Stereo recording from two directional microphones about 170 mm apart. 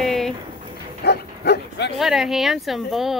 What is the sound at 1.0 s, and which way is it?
Bow-wow, 75° left (ahead or behind).